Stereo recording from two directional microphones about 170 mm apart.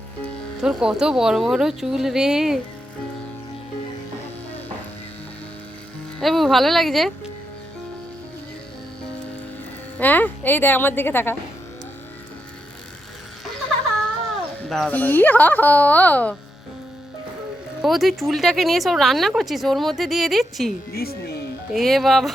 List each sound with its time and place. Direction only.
0.6 s speech: 5° right (ahead or behind)
6.1 s speech: centre (ahead or behind)
10.0 s speech: 10° left (ahead or behind)
14.7 s speech: 5° left (ahead or behind)
17.8 s speech: centre (ahead or behind)
20.9 s speech: 65° left (ahead or behind)
21.7 s speech: centre (ahead or behind)